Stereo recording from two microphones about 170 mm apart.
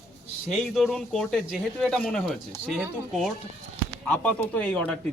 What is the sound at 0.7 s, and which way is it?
Speech, centre (ahead or behind).